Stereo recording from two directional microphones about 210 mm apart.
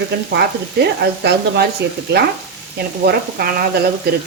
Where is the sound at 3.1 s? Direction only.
45° right (ahead or behind).